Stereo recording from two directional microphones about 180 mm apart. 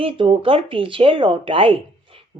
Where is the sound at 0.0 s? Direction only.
30° right (ahead or behind).